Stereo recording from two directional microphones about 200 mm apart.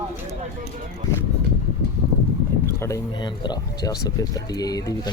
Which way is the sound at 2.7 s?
15° left (ahead or behind).